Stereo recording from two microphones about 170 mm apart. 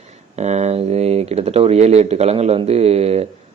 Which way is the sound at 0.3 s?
40° right (ahead or behind).